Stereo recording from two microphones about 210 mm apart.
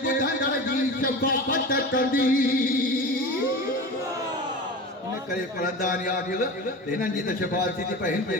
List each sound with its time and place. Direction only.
1.0 s speech: 40° left (ahead or behind)
5.8 s speech: 40° left (ahead or behind)